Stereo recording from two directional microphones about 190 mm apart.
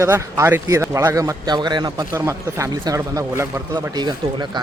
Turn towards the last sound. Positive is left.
turn(degrees=-20)  # may be behind; listen again after turning